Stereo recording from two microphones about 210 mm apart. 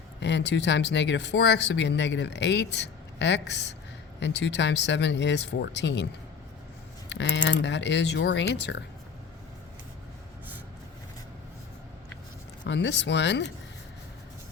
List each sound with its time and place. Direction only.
0.2 s speech: 55° left (ahead or behind)
7.1 s speech: 60° left (ahead or behind)
12.6 s speech: 60° left (ahead or behind)